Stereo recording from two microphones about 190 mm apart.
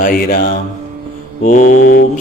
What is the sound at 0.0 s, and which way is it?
Mantra, 45° left (ahead or behind).